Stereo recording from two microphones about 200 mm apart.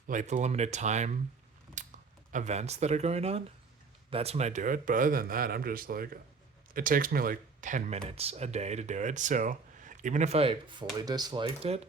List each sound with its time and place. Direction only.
0.1 s speech: 35° right (ahead or behind)
1.8 s a sound: 40° right (ahead or behind)
2.3 s speech: 35° right (ahead or behind)